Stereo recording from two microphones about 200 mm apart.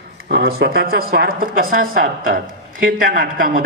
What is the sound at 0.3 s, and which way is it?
A man's voice, 50° right (ahead or behind).